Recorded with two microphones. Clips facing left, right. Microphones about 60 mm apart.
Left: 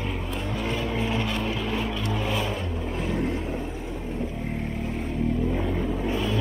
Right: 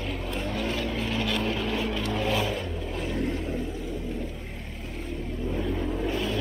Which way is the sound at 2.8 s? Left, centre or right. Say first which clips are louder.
Left 3 dB; centre.